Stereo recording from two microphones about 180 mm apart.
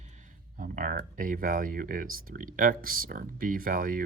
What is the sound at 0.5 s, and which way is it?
Speech, 50° right (ahead or behind).